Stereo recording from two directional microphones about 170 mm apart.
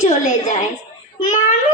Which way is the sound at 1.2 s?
45° left (ahead or behind).